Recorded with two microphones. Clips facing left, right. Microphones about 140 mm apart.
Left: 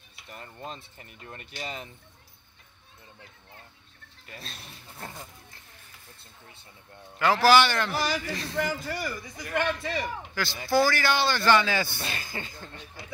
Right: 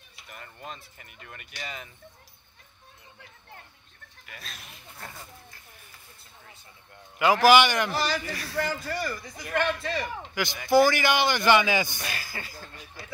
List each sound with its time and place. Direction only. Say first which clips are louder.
0.3 s speech: left 2 dB; 30° left (ahead or behind)
4.3 s speech: left 2 dB; 30° left (ahead or behind)
7.2 s a man's voice: right 1 dB; 15° right (ahead or behind)
7.9 s a man's voice: even; 15° left (ahead or behind)
10.3 s a man's voice: right 4 dB; 15° right (ahead or behind)
12.0 s speech: left 1 dB; 25° left (ahead or behind)